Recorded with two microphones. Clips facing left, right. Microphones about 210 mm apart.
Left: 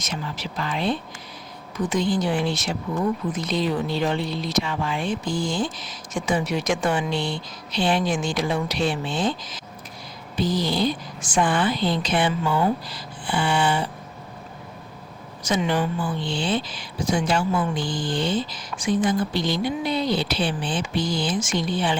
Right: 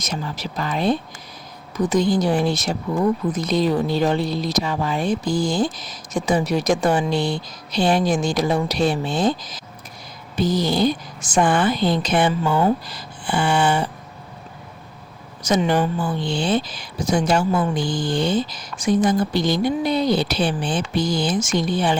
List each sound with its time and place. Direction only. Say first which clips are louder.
0.0 s speech: right 3 dB; 40° right (ahead or behind)
15.4 s speech: right 4 dB; 40° right (ahead or behind)